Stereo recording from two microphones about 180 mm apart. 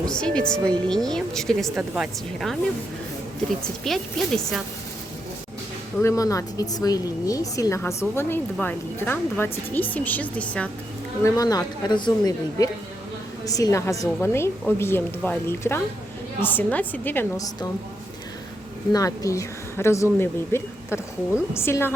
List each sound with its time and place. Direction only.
0.1 s a woman's voice: 5° left (ahead or behind)
3.8 s a woman's voice: centre (ahead or behind)
6.0 s a woman's voice: 15° left (ahead or behind)
11.2 s a woman's voice: 20° left (ahead or behind)
18.9 s a woman's voice: 20° left (ahead or behind)